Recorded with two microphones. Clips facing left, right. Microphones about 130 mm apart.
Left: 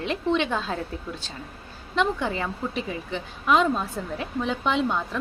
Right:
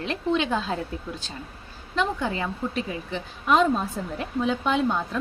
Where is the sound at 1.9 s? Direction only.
Centre (ahead or behind).